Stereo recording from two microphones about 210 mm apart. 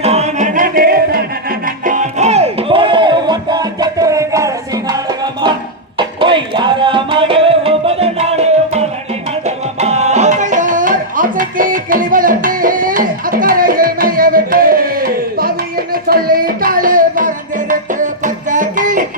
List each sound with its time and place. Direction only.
0.0 s music: 30° right (ahead or behind)